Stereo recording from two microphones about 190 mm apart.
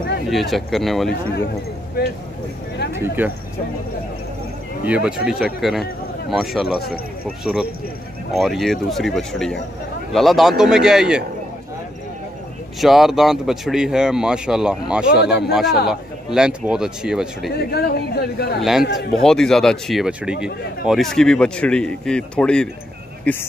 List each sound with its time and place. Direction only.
0.3 s speech: centre (ahead or behind)
3.2 s speech: 10° right (ahead or behind)
4.8 s speech: 5° right (ahead or behind)
8.3 s speech: centre (ahead or behind)
12.8 s speech: centre (ahead or behind)
17.6 s speech: 55° left (ahead or behind)
18.6 s speech: centre (ahead or behind)